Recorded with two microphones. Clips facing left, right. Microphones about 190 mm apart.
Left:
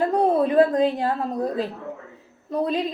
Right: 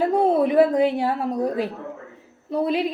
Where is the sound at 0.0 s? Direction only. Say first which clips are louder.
Right 1 dB; 10° right (ahead or behind).